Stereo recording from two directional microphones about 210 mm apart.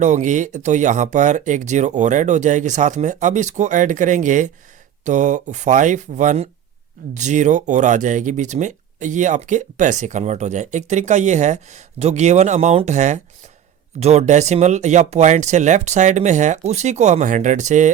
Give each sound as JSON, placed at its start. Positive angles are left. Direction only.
{"t": 0.0, "sound": "speech", "side_deg": -35}